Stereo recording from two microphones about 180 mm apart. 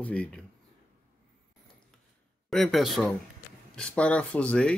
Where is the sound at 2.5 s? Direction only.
Centre (ahead or behind).